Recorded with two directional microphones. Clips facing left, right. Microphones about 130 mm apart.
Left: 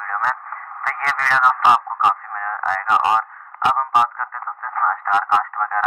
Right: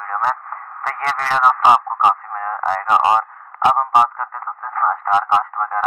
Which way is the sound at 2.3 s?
20° right (ahead or behind).